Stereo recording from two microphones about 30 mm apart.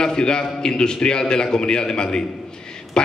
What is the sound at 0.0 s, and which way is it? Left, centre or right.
A man's voice, left.